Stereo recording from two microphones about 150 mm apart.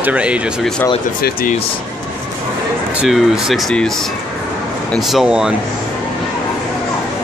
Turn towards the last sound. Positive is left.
turn(degrees=-5)  # may be behind; listen again after turning